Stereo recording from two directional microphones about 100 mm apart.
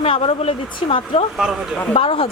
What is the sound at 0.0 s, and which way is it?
Speech, 70° left (ahead or behind).